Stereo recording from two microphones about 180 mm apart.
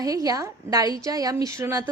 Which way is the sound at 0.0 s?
20° right (ahead or behind).